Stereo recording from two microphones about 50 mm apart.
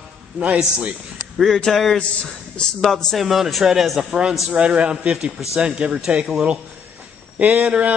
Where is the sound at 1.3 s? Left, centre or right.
Centre.